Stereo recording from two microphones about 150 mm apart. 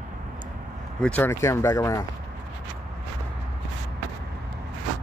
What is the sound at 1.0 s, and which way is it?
Speech, 10° left (ahead or behind).